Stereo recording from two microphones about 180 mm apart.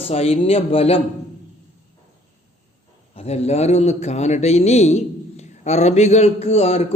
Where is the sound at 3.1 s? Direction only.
35° left (ahead or behind).